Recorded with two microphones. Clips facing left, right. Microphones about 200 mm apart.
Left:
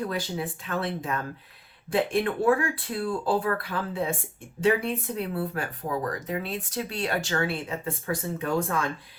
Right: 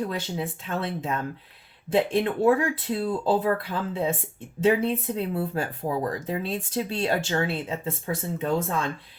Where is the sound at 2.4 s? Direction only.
25° right (ahead or behind).